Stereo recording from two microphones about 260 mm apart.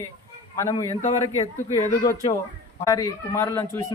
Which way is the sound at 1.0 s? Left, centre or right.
Left.